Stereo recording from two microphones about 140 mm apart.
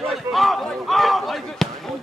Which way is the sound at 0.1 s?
Centre (ahead or behind).